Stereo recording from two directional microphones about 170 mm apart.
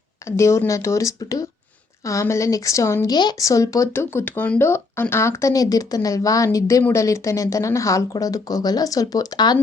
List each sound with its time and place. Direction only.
0.3 s speech: 15° left (ahead or behind)